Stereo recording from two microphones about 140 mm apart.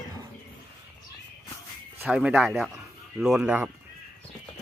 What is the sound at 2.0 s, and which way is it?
Speech, 10° right (ahead or behind).